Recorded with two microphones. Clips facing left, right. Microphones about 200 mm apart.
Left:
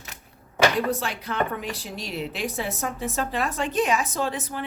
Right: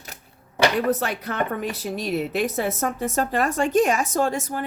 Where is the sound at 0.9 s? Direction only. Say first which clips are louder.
Right 2 dB; 50° right (ahead or behind).